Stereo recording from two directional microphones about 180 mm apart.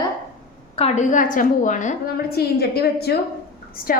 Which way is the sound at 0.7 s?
35° left (ahead or behind).